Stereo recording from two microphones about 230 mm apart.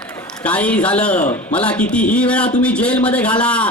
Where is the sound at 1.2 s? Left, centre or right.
Left.